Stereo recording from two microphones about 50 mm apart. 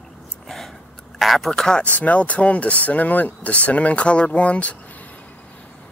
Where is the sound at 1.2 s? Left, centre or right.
Centre.